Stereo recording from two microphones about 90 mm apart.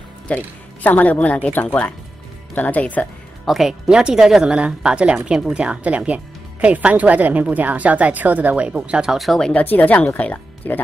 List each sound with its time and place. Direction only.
0.3 s speech: 15° left (ahead or behind)
3.4 s speech: 5° right (ahead or behind)
9.5 s speech: 15° left (ahead or behind)